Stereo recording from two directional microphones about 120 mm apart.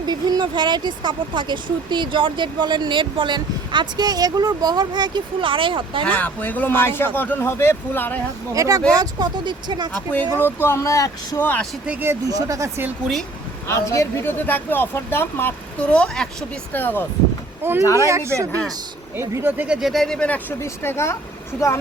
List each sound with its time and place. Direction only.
0.0 s speech: 35° right (ahead or behind)
6.1 s speech: 15° left (ahead or behind)
8.5 s speech: 25° right (ahead or behind)
9.9 s speech: 15° left (ahead or behind)
11.9 s speech: 15° right (ahead or behind)
12.3 s speech: 25° right (ahead or behind)
13.7 s speech: 25° left (ahead or behind)
17.6 s speech: 20° right (ahead or behind); by 20.4 s 10° left (ahead or behind)
20.6 s speech: 20° left (ahead or behind)